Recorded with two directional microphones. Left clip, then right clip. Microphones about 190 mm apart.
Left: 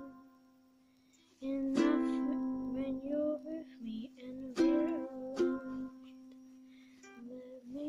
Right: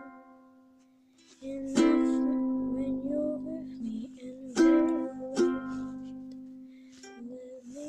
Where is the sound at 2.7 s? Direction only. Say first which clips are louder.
Right 5 dB; 15° right (ahead or behind).